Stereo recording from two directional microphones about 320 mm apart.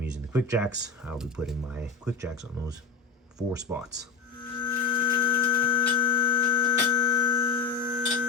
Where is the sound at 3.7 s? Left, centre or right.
Centre.